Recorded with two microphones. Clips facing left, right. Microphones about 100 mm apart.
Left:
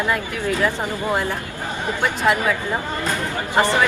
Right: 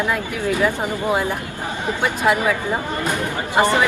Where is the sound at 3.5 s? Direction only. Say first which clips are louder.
Right 1 dB; 20° right (ahead or behind).